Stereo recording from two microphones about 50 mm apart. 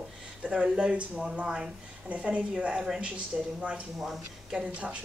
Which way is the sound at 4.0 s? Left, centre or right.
Centre.